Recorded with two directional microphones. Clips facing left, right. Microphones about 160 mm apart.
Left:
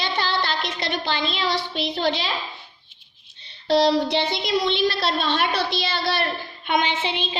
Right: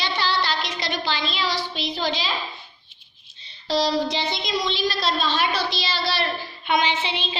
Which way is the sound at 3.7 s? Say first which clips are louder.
Left 4 dB; 60° left (ahead or behind).